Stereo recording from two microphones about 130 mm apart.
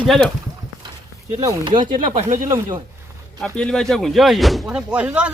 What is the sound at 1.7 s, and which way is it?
Speech, 40° right (ahead or behind).